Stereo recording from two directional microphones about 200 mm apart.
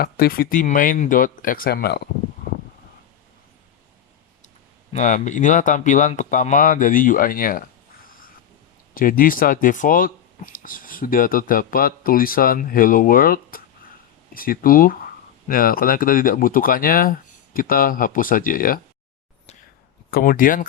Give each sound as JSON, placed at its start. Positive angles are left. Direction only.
{"t": 0.0, "sound": "speech", "side_deg": 50}
{"t": 4.4, "sound": "speech", "side_deg": 35}
{"t": 9.0, "sound": "speech", "side_deg": 45}
{"t": 20.1, "sound": "speech", "side_deg": 45}